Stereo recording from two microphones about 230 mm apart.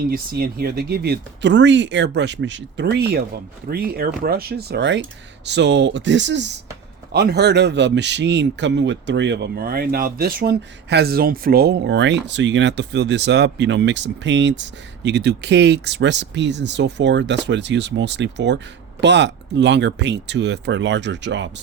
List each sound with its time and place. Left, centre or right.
0.1 s speech: right